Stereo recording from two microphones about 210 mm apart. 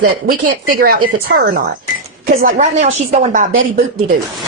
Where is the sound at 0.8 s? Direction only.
40° right (ahead or behind).